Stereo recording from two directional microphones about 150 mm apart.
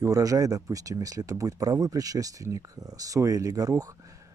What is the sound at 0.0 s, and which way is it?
Speech, 25° right (ahead or behind).